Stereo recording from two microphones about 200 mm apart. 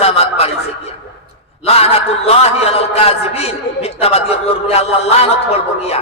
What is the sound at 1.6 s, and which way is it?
A man's voice, 30° left (ahead or behind).